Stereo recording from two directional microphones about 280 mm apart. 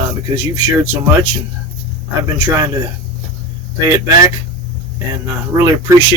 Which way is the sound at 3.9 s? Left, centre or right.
Centre.